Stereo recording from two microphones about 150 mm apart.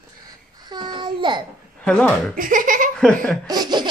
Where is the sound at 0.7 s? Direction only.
30° right (ahead or behind).